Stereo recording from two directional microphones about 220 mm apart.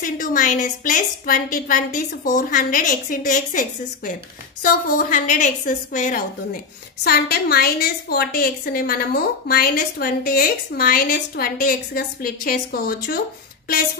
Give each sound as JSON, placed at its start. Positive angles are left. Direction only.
{"t": 0.0, "sound": "a woman's voice", "side_deg": 40}